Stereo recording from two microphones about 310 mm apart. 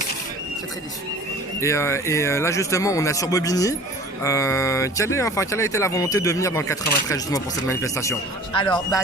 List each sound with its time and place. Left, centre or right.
1.6 s speech: centre